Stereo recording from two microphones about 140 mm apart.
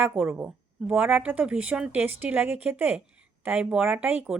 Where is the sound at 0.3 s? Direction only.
15° right (ahead or behind).